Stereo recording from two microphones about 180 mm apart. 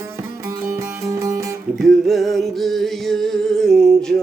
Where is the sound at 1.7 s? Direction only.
Centre (ahead or behind).